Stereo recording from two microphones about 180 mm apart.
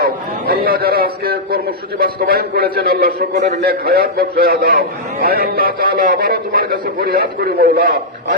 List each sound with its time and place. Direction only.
0.6 s a man's voice: 55° right (ahead or behind)